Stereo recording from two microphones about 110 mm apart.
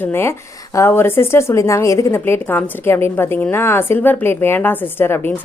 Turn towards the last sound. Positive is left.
turn(degrees=20)  # may be behind; listen again after turning